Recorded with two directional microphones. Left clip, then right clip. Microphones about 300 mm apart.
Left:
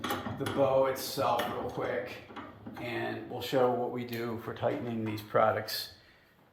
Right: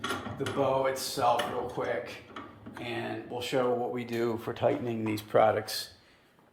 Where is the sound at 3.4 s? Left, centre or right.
Centre.